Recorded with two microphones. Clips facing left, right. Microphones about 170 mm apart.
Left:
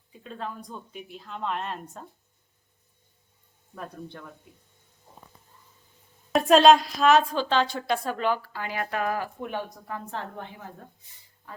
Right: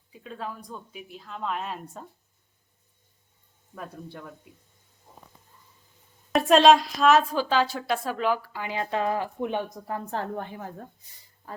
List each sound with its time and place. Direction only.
0.1 s a woman's voice: 5° right (ahead or behind)
3.8 s a woman's voice: 5° right (ahead or behind)
6.3 s a woman's voice: centre (ahead or behind); by 9.7 s 20° right (ahead or behind)
9.8 s a woman's voice: 40° right (ahead or behind)